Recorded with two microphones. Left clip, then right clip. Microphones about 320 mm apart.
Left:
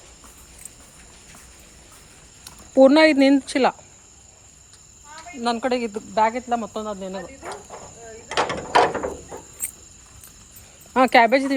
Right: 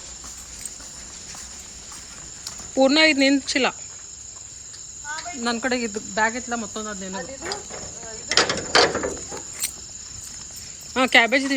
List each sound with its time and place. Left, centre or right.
2.4 s speech: centre
5.4 s speech: centre
8.3 s mechanisms: left
10.9 s speech: centre